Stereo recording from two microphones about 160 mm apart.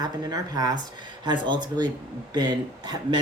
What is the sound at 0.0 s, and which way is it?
Speech, 25° right (ahead or behind).